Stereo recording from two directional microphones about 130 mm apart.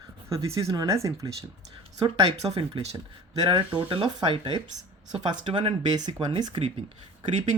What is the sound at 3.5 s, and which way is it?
Speech, 40° right (ahead or behind).